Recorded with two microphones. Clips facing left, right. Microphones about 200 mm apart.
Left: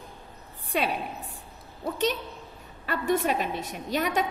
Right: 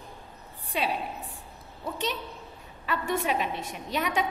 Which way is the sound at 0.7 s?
50° left (ahead or behind).